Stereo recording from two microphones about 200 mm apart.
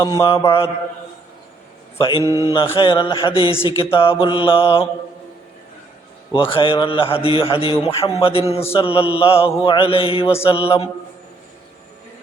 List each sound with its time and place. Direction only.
0.0 s mantra: 15° left (ahead or behind)
2.0 s a man's voice: 25° left (ahead or behind)
2.2 s mantra: 15° right (ahead or behind)
2.7 s a man's voice: 25° left (ahead or behind)
6.3 s a man's voice: 25° left (ahead or behind)